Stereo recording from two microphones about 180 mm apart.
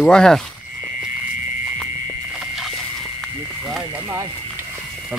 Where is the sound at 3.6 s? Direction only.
5° right (ahead or behind).